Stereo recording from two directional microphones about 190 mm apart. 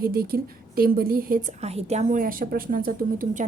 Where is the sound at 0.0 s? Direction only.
50° right (ahead or behind).